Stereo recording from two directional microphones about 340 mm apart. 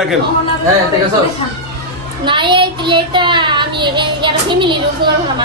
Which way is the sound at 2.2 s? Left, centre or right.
Centre.